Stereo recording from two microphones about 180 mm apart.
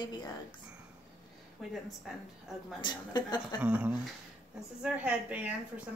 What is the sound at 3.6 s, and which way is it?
A woman's voice, 5° right (ahead or behind).